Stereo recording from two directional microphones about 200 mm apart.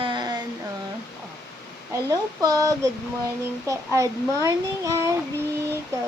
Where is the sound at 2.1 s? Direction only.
15° right (ahead or behind).